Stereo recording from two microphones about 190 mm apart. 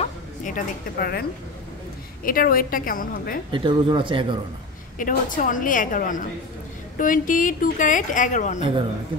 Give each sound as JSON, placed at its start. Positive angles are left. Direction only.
{"t": 0.0, "sound": "a woman's voice", "side_deg": 40}
{"t": 2.2, "sound": "a woman's voice", "side_deg": 50}
{"t": 3.5, "sound": "a man's voice", "side_deg": -25}
{"t": 4.9, "sound": "a woman's voice", "side_deg": 45}